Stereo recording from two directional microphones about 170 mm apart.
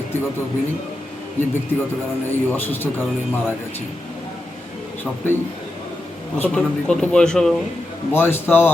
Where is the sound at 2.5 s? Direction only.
10° left (ahead or behind).